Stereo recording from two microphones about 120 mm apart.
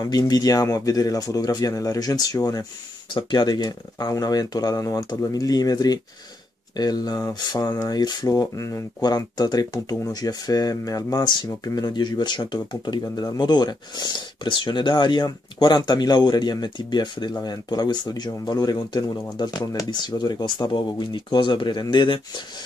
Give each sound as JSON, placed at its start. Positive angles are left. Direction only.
{"t": 0.0, "sound": "speech", "side_deg": 30}